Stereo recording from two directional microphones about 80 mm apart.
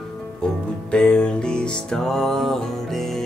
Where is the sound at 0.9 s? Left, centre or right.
Centre.